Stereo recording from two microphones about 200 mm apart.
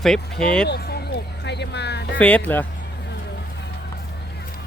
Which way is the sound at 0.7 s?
55° left (ahead or behind).